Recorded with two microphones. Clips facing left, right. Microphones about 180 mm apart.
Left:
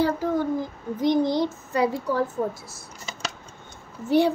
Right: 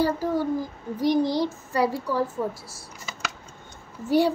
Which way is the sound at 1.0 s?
20° left (ahead or behind).